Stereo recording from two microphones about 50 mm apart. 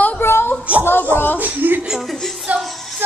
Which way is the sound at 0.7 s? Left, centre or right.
Right.